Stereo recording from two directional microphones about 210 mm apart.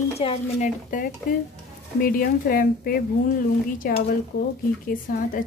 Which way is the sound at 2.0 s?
45° left (ahead or behind).